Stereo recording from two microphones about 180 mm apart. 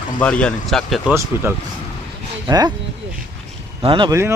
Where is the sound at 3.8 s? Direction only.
25° right (ahead or behind).